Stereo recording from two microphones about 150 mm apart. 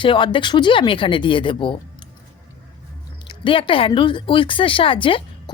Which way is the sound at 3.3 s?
35° left (ahead or behind).